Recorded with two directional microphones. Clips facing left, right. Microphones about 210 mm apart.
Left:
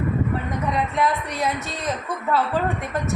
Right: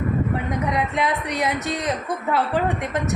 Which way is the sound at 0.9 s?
15° right (ahead or behind).